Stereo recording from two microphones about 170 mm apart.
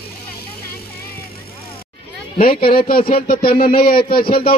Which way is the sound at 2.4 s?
55° left (ahead or behind).